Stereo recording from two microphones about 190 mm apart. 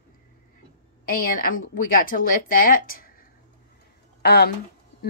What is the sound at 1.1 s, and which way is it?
A woman's voice, 50° left (ahead or behind).